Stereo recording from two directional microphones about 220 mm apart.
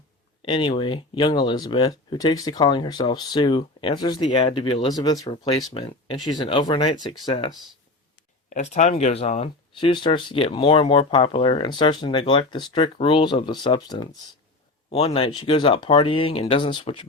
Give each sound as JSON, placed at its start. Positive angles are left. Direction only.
{"t": 0.4, "sound": "speech", "side_deg": 20}
{"t": 8.4, "sound": "speech", "side_deg": 35}